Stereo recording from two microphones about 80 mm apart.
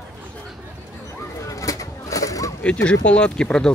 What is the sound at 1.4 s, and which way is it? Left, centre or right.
Bird, left.